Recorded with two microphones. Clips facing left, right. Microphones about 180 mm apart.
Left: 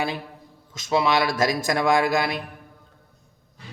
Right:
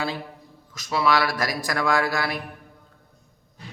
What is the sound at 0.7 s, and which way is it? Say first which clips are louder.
A man's voice: left 1 dB; 25° left (ahead or behind).